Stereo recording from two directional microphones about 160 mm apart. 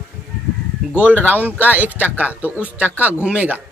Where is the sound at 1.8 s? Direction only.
10° left (ahead or behind).